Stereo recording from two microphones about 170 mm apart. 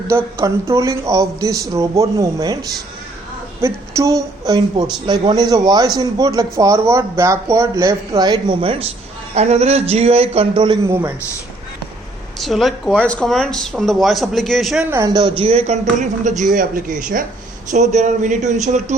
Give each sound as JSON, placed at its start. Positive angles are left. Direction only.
{"t": 0.3, "sound": "speech", "side_deg": -15}
{"t": 3.6, "sound": "a man's voice", "side_deg": -20}
{"t": 10.8, "sound": "speech", "side_deg": -15}
{"t": 12.4, "sound": "speech", "side_deg": 0}
{"t": 14.8, "sound": "speech", "side_deg": -15}
{"t": 15.2, "sound": "a man's voice", "side_deg": -35}